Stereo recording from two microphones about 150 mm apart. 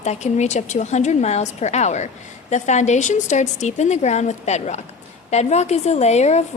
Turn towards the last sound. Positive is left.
turn(degrees=50)  # may be behind; listen again after turning